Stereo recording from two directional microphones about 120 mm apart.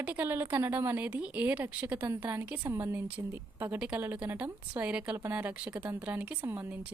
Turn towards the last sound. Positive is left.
turn(degrees=-15)  # may be behind; listen again after turning